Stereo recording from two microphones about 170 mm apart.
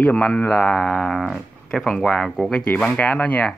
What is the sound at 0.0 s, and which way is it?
Speech, 10° left (ahead or behind).